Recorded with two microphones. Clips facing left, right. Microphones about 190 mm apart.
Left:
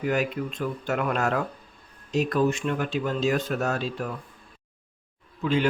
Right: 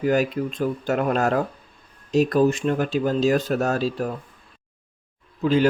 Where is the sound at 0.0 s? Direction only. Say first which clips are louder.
Right 5 dB; 40° right (ahead or behind).